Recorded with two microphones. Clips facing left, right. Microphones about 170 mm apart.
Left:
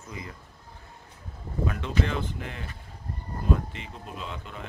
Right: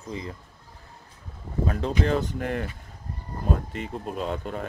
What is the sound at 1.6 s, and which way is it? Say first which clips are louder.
Speech: right 3 dB; 35° right (ahead or behind).